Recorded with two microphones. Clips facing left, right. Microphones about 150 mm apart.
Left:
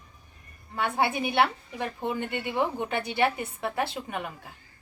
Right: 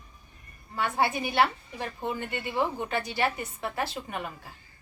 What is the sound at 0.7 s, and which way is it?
A woman's voice, 10° left (ahead or behind).